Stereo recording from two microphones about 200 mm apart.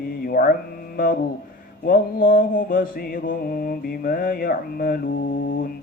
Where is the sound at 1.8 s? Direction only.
45° left (ahead or behind).